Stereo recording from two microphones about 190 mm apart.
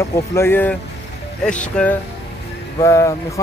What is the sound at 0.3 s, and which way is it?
Speech, 10° left (ahead or behind).